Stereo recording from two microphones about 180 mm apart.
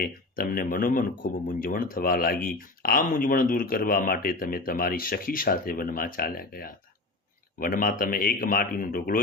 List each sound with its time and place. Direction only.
0.0 s speech: 55° left (ahead or behind)